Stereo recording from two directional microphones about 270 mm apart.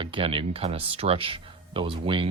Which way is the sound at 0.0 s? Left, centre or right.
Centre.